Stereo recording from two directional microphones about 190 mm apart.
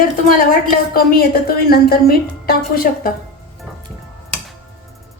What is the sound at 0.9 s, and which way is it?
A woman's voice, 50° left (ahead or behind).